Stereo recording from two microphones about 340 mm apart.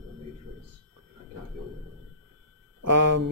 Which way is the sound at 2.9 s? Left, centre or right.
Right.